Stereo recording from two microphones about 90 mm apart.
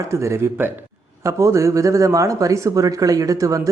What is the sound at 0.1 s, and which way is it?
Speech, 30° right (ahead or behind).